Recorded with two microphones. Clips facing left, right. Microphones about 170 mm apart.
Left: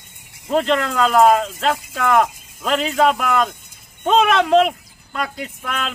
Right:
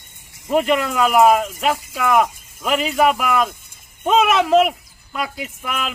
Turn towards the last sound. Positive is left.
turn(degrees=-5)  # may be behind; listen again after turning